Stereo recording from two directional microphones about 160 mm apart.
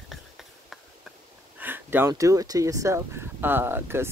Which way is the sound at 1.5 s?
10° right (ahead or behind).